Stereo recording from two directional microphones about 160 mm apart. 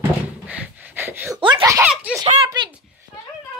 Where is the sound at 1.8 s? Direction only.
5° right (ahead or behind).